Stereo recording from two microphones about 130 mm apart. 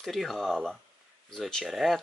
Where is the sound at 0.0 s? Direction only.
Centre (ahead or behind).